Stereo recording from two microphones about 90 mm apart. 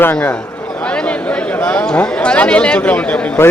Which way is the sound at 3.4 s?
25° left (ahead or behind).